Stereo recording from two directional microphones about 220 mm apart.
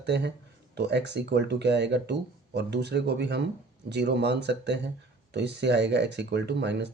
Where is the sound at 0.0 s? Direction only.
50° right (ahead or behind).